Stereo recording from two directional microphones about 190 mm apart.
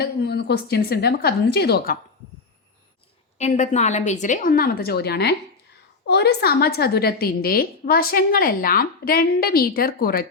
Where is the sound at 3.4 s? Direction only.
35° left (ahead or behind).